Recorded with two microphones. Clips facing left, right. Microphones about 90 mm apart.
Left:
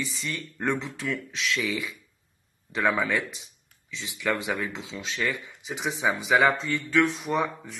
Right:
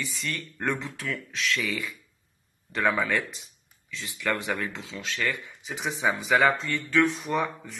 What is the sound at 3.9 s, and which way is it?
Speech, 20° left (ahead or behind).